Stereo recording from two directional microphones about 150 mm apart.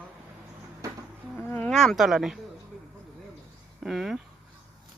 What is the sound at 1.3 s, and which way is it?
Speech, 5° left (ahead or behind).